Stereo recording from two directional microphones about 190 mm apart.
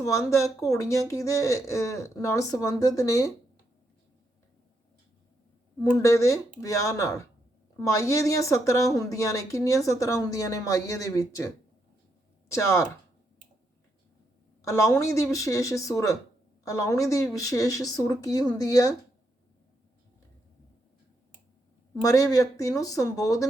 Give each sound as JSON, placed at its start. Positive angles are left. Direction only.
{"t": 0.0, "sound": "a woman's voice", "side_deg": 15}
{"t": 5.8, "sound": "a woman's voice", "side_deg": 15}
{"t": 14.7, "sound": "a woman's voice", "side_deg": 15}
{"t": 22.0, "sound": "a woman's voice", "side_deg": 15}